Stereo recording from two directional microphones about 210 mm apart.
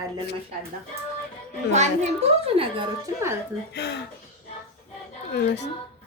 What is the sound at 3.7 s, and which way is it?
Speech, 55° left (ahead or behind).